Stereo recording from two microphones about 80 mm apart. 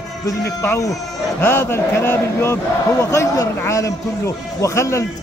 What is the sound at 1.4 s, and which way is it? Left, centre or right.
A man's voice, left.